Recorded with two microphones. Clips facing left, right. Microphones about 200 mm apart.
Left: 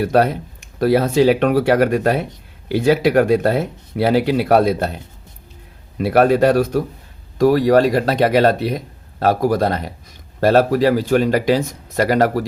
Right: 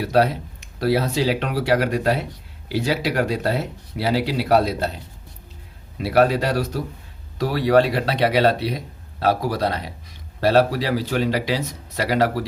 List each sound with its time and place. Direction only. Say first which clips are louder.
0.0 s speech: left 3 dB; 50° left (ahead or behind)
6.0 s speech: left 5 dB; 50° left (ahead or behind)